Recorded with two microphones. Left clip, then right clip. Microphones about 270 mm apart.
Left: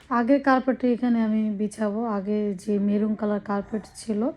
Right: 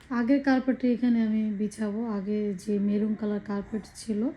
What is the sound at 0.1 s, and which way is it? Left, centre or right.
Speech, centre.